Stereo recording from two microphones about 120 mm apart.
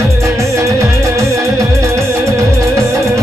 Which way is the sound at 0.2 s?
25° right (ahead or behind).